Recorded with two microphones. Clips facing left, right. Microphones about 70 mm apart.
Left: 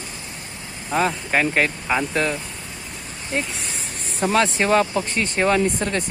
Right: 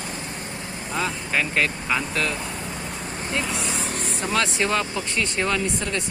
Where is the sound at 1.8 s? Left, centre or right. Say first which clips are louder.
Left 3 dB; left.